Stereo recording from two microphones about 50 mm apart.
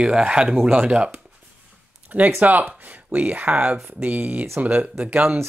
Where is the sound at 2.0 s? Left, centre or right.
Right.